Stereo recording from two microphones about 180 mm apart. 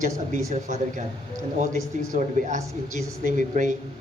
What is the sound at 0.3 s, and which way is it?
Speech, 45° right (ahead or behind).